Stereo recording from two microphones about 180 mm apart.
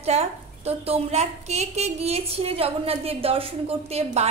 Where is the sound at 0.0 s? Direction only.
35° right (ahead or behind).